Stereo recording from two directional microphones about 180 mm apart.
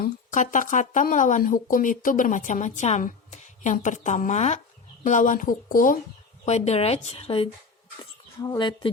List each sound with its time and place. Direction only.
0.0 s speech: 45° left (ahead or behind)
6.4 s speech: 35° left (ahead or behind)